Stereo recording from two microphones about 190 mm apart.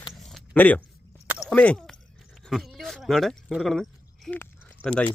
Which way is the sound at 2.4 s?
Centre (ahead or behind).